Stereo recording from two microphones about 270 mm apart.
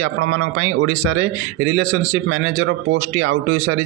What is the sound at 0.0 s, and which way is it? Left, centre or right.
A man's voice, right.